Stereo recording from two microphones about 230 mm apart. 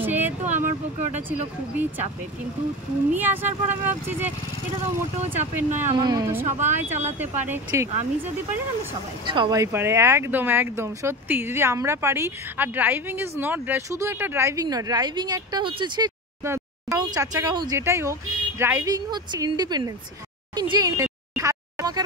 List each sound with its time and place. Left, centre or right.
0.0 s a sound: centre
0.4 s speech: right
3.1 s speech: centre
5.6 s speech: centre
9.2 s speech: right
20.5 s a sound: centre